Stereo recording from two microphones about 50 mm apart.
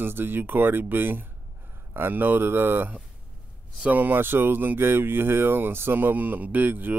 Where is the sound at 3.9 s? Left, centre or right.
Right.